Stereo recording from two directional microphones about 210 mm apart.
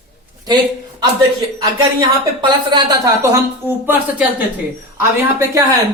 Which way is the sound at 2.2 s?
20° right (ahead or behind).